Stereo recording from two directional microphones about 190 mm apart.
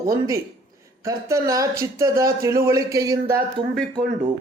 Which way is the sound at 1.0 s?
15° right (ahead or behind).